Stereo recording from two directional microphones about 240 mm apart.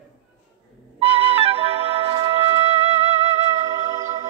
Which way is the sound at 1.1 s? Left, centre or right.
Right.